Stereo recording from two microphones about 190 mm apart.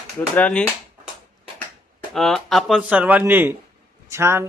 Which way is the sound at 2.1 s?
Centre (ahead or behind).